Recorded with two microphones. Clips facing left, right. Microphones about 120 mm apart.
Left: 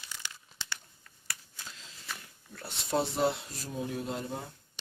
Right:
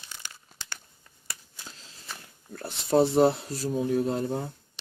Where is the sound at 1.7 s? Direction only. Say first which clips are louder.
Even; 35° right (ahead or behind).